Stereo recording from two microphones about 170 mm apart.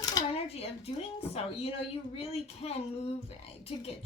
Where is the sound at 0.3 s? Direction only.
35° left (ahead or behind).